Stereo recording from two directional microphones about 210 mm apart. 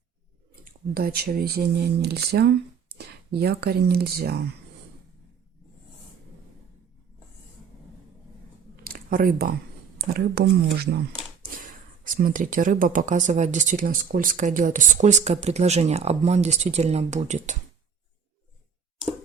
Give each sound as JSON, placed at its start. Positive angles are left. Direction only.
{"t": 0.6, "sound": "speech", "side_deg": -45}
{"t": 8.7, "sound": "a sound", "side_deg": -45}
{"t": 10.2, "sound": "speech", "side_deg": -50}